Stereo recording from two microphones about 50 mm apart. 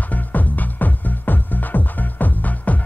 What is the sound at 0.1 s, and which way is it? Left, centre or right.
Music, left.